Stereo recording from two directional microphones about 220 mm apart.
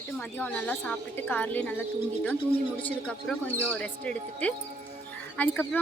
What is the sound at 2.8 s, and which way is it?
Speech, 5° left (ahead or behind).